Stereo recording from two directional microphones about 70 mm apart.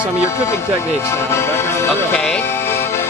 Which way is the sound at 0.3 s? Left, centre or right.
Left.